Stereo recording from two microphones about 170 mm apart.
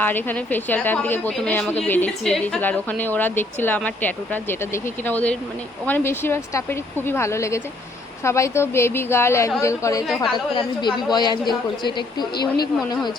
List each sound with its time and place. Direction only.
0.0 s a woman's voice: 10° left (ahead or behind)